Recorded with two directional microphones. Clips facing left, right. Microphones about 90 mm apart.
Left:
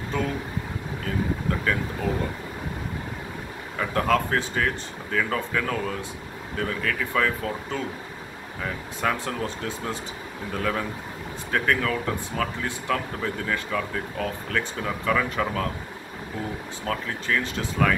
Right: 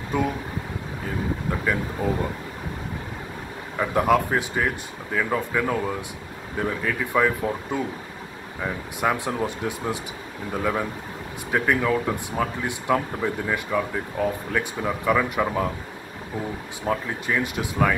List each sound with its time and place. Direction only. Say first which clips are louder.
0.1 s speech: right 4 dB; 15° right (ahead or behind)
3.7 s speech: right 3 dB; 15° right (ahead or behind)
16.8 s speech: right 4 dB; 15° right (ahead or behind)